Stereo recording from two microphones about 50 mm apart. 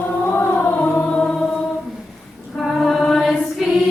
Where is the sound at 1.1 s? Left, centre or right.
Centre.